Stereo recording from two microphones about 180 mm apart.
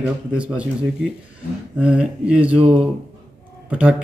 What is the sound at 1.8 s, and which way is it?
Speech, 5° right (ahead or behind).